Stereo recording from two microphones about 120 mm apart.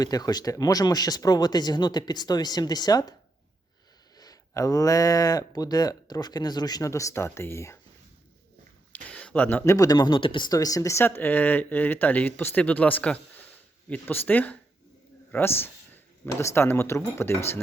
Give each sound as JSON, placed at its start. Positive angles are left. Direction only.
{"t": 0.0, "sound": "speech", "side_deg": 35}
{"t": 4.2, "sound": "speech", "side_deg": 30}
{"t": 8.9, "sound": "a sound", "side_deg": 10}
{"t": 9.6, "sound": "speech", "side_deg": 30}